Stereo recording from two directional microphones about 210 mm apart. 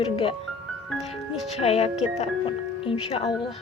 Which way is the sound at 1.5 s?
30° left (ahead or behind).